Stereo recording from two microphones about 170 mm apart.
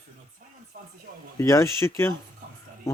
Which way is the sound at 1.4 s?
15° left (ahead or behind).